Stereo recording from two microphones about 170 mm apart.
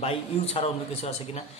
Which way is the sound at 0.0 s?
35° left (ahead or behind).